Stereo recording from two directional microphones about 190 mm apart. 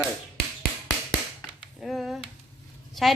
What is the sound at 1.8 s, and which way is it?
Speech, centre (ahead or behind).